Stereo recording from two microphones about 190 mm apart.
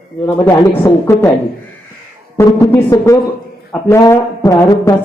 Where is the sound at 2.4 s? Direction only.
15° left (ahead or behind).